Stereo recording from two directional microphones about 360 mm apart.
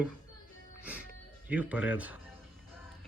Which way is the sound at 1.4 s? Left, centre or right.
Centre.